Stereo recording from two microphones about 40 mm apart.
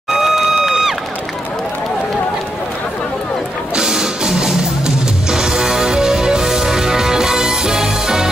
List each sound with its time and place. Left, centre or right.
0.1 s crowd: centre
3.7 s music: centre